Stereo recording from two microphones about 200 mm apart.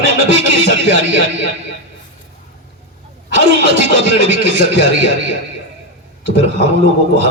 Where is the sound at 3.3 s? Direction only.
65° right (ahead or behind).